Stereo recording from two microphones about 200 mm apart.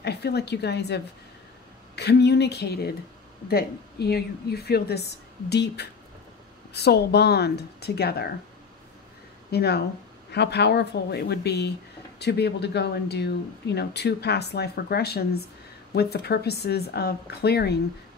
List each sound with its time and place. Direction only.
0.0 s a woman's voice: 55° left (ahead or behind)
9.5 s a woman's voice: 55° left (ahead or behind)